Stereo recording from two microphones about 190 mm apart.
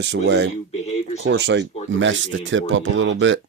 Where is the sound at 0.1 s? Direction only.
65° right (ahead or behind).